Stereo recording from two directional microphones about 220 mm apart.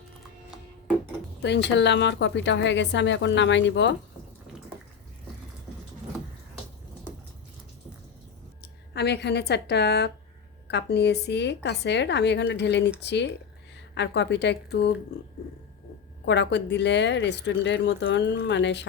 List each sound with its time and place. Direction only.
1.4 s speech: 50° left (ahead or behind)
8.6 s speech: 50° left (ahead or behind)
16.2 s speech: 50° left (ahead or behind)